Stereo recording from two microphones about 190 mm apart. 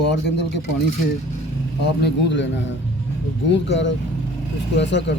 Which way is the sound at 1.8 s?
65° left (ahead or behind).